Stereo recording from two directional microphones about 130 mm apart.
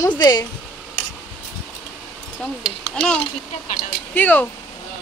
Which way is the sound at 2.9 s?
10° left (ahead or behind).